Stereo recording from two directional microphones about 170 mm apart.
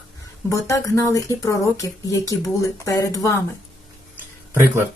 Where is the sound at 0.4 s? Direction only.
20° left (ahead or behind).